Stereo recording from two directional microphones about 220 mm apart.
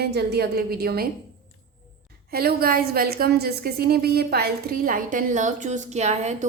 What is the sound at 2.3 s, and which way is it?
A woman's voice, 45° right (ahead or behind).